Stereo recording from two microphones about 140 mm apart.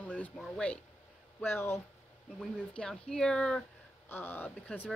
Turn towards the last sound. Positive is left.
turn(degrees=10)  # may be behind; listen again after turning